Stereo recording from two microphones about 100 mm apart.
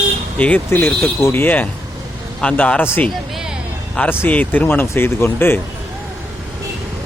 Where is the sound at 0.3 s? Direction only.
15° left (ahead or behind).